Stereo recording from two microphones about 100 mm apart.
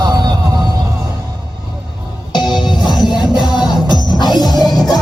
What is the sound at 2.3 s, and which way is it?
Music, 50° left (ahead or behind).